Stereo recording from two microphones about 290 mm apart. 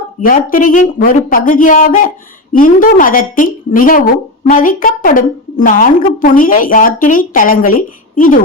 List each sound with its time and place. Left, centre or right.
0.3 s a woman's voice: left